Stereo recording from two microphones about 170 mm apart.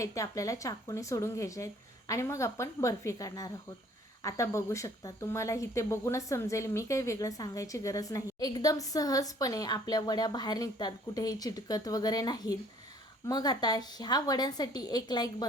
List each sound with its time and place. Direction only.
0.0 s speech: 20° left (ahead or behind)